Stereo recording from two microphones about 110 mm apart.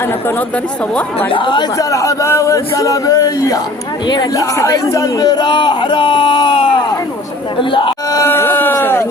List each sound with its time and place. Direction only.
1.3 s speech: 50° left (ahead or behind)
1.8 s speech: 30° left (ahead or behind)
4.0 s speech: 45° left (ahead or behind)
4.4 s speech: 30° left (ahead or behind); by 8.2 s 50° left (ahead or behind)
8.2 s speech: 20° left (ahead or behind)